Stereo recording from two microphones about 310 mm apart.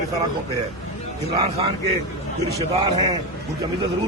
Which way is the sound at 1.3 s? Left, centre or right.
Centre.